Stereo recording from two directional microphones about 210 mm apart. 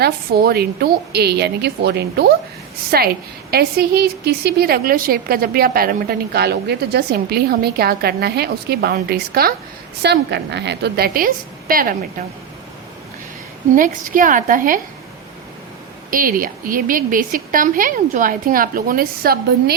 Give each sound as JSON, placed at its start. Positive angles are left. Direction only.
{"t": 0.0, "sound": "a woman's voice", "side_deg": -45}
{"t": 13.7, "sound": "a woman's voice", "side_deg": -40}
{"t": 16.0, "sound": "a woman's voice", "side_deg": -40}